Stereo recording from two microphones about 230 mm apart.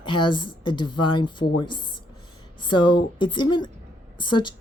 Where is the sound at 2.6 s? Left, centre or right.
Left.